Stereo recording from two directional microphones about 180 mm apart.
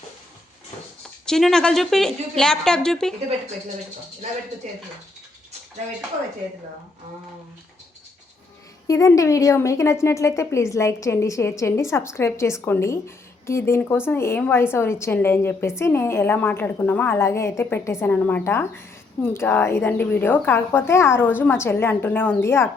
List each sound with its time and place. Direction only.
1.2 s a woman's voice: 5° left (ahead or behind)
8.9 s a woman's voice: 15° left (ahead or behind)